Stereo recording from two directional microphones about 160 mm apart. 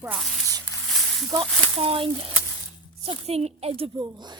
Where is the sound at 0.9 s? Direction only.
Centre (ahead or behind).